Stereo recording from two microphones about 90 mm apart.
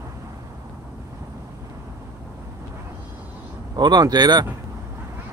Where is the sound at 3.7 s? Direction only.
50° right (ahead or behind).